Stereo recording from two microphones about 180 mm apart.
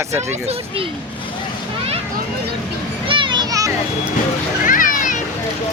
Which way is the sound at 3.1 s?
25° right (ahead or behind).